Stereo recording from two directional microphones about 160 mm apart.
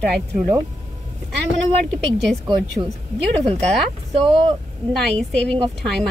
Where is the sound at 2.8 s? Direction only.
25° right (ahead or behind).